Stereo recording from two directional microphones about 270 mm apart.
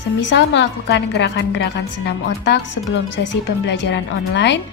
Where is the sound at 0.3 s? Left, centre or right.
Left.